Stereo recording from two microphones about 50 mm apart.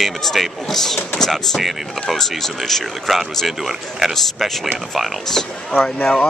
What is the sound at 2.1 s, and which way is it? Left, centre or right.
Speech, centre.